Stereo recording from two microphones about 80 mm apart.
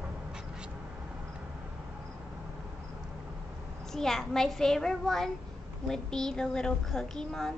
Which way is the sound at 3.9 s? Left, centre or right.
Centre.